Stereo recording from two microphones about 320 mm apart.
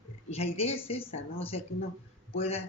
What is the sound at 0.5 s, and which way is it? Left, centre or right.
Speech, centre.